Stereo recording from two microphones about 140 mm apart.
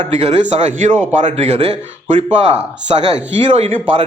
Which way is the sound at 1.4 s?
50° right (ahead or behind).